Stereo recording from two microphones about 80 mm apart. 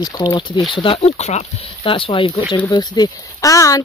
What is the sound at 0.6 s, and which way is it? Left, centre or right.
Speech, left.